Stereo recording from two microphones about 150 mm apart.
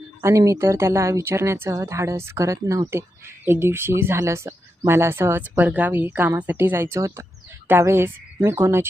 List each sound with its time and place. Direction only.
0.2 s speech: 20° right (ahead or behind)